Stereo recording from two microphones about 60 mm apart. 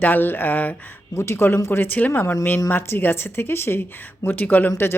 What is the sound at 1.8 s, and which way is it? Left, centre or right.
Speech, left.